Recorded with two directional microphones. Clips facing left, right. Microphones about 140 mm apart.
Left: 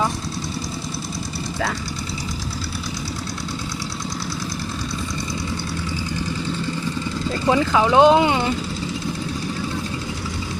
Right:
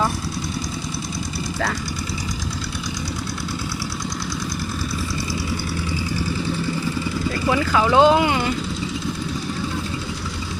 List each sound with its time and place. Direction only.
7.3 s speech: 25° left (ahead or behind)